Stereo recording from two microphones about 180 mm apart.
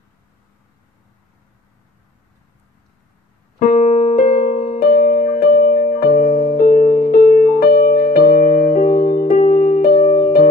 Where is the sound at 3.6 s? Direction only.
50° left (ahead or behind).